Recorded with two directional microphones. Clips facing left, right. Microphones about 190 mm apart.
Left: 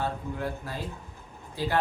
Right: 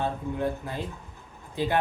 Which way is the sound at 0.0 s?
20° right (ahead or behind).